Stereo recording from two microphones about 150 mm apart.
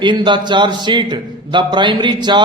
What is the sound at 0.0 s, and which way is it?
A man's voice, 30° right (ahead or behind).